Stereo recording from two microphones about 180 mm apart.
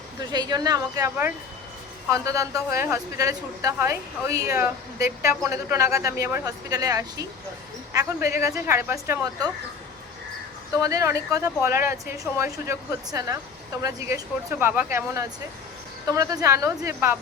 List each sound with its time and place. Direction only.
0.3 s a woman's voice: 20° right (ahead or behind)
10.8 s speech: 20° right (ahead or behind)
14.6 s speech: 10° right (ahead or behind)